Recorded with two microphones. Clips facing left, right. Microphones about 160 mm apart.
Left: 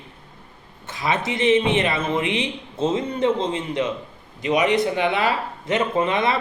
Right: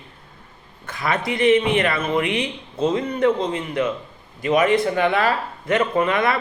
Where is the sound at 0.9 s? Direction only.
20° left (ahead or behind).